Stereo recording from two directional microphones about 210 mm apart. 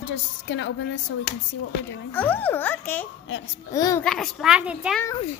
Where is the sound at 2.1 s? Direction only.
10° left (ahead or behind).